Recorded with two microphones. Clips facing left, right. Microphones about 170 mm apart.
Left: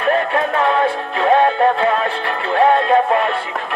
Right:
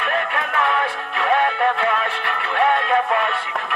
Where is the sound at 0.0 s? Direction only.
35° left (ahead or behind).